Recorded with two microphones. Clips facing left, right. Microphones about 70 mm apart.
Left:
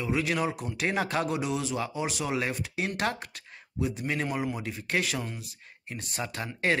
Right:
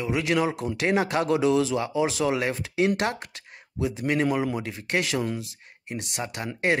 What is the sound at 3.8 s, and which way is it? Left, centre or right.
Speech, right.